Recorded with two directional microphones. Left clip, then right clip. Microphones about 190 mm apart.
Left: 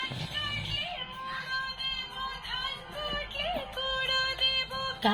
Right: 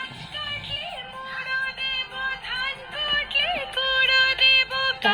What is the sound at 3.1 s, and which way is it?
Music, 15° right (ahead or behind).